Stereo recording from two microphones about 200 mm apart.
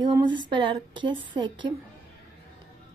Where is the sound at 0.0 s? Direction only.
20° right (ahead or behind).